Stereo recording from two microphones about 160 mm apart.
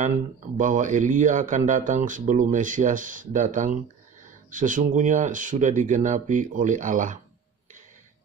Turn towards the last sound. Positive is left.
turn(degrees=-55)  # may be behind; listen again after turning